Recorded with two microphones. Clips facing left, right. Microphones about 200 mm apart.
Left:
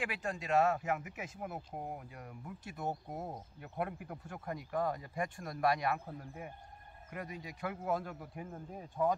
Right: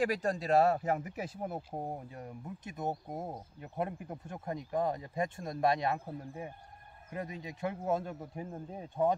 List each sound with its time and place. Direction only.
0.0 s speech: 40° right (ahead or behind)